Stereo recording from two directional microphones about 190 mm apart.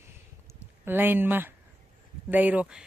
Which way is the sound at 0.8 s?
10° right (ahead or behind).